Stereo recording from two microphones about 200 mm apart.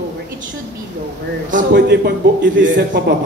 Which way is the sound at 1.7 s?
55° right (ahead or behind).